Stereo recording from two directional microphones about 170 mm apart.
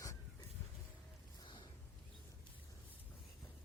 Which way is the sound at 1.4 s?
25° left (ahead or behind).